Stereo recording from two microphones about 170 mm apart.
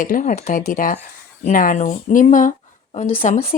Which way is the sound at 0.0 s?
50° left (ahead or behind).